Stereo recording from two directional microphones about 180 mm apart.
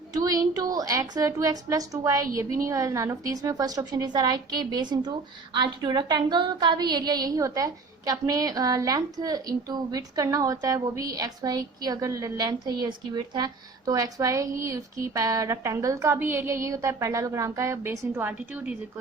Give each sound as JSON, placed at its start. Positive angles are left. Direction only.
{"t": 0.1, "sound": "a woman's voice", "side_deg": -20}